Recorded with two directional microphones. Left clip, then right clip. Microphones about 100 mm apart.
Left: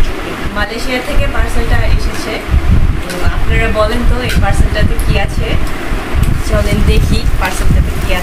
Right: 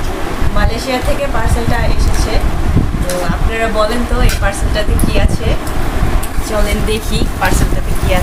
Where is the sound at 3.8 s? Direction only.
Centre (ahead or behind).